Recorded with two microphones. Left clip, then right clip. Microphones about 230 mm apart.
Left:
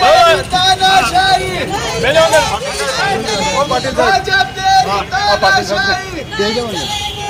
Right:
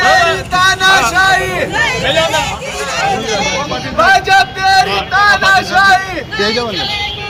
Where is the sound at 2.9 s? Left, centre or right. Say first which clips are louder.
Right 3 dB; centre.